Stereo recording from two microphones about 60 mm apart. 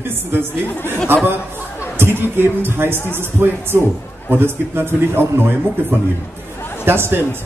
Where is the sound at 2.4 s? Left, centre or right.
Right.